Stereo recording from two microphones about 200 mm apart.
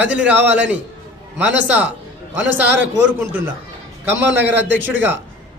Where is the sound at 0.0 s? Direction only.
5° right (ahead or behind).